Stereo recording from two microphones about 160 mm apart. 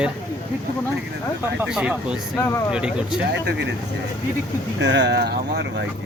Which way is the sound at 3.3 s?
90° right.